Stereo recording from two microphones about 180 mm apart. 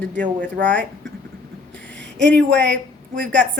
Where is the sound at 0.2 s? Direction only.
50° right (ahead or behind).